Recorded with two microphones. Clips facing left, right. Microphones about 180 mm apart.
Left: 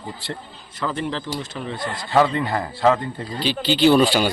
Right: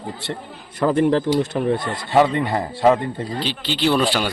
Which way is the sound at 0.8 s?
50° right (ahead or behind).